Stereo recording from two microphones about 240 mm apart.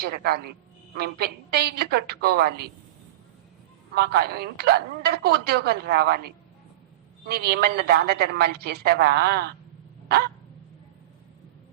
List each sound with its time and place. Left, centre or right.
0.0 s a woman's voice: right
3.9 s a woman's voice: right